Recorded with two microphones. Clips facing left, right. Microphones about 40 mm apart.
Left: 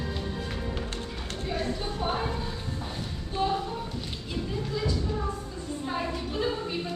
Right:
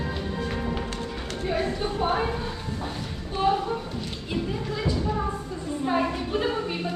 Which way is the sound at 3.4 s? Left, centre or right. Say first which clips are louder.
Right 5 dB; right.